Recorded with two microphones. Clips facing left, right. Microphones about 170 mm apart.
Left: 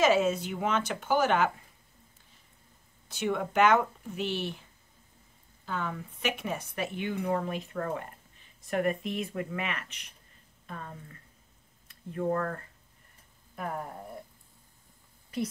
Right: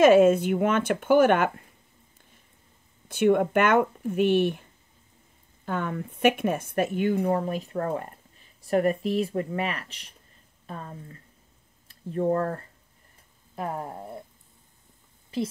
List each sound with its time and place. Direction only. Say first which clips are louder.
0.0 s speech: right 8 dB; 55° right (ahead or behind)
3.1 s speech: right 10 dB; 55° right (ahead or behind)
5.7 s speech: right 5 dB; 55° right (ahead or behind); by 13.9 s 35° right (ahead or behind)